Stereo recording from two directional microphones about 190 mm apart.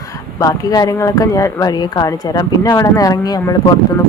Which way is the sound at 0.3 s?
20° left (ahead or behind).